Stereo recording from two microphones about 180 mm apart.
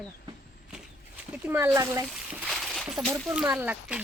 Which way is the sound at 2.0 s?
5° right (ahead or behind).